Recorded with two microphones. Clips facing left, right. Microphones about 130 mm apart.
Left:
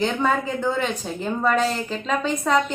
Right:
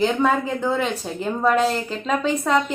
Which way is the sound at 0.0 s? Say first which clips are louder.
Right 2 dB; 5° right (ahead or behind).